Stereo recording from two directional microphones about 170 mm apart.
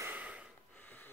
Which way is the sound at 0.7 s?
10° left (ahead or behind).